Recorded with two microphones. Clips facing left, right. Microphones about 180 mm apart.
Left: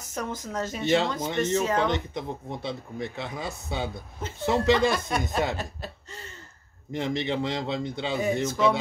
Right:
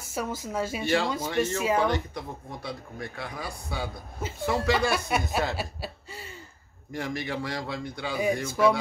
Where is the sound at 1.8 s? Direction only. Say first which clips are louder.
Even; 20° left (ahead or behind).